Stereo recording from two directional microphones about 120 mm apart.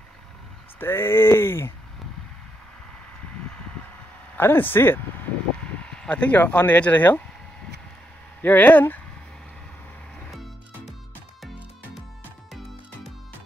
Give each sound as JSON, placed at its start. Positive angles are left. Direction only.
{"t": 0.7, "sound": "speech", "side_deg": 20}
{"t": 4.4, "sound": "speech", "side_deg": 15}
{"t": 8.4, "sound": "speech", "side_deg": 15}